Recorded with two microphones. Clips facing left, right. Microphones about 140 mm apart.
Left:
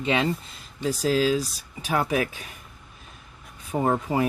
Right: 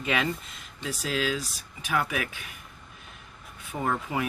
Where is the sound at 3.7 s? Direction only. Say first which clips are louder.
Left 6 dB; 35° left (ahead or behind).